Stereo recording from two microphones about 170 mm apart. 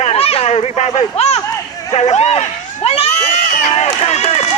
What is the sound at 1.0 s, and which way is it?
Speech, 35° left (ahead or behind).